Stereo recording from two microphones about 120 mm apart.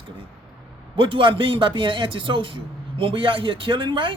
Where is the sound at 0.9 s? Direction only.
45° right (ahead or behind).